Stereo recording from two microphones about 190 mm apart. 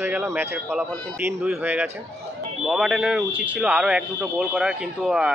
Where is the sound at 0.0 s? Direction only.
10° right (ahead or behind).